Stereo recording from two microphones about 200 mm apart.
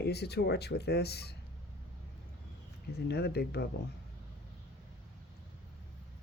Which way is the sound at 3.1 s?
55° left (ahead or behind).